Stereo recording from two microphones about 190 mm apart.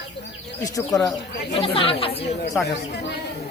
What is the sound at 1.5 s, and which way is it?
Speech, 30° left (ahead or behind).